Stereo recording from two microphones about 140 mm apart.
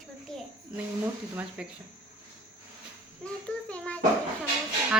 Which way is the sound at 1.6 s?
5° right (ahead or behind).